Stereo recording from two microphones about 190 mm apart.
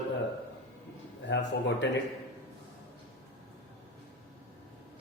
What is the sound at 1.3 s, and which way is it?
Speech, 70° left (ahead or behind).